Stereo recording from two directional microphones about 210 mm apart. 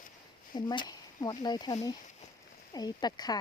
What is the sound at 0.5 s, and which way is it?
Speech, 20° left (ahead or behind).